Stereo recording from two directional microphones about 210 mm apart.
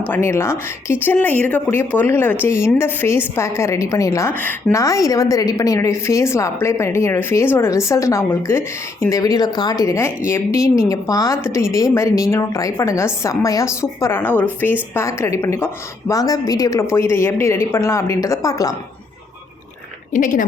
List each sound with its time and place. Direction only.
0.1 s a woman's voice: 10° left (ahead or behind)
20.1 s a woman's voice: 40° left (ahead or behind)